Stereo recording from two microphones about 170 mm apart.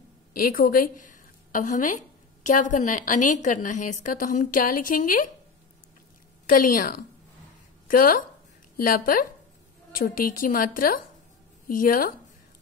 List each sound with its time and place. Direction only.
0.4 s a woman's voice: 60° left (ahead or behind)
6.5 s a woman's voice: 55° left (ahead or behind)